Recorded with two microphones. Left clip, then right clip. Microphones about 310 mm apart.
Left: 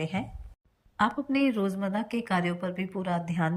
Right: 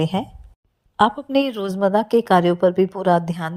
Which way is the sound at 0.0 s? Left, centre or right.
Centre.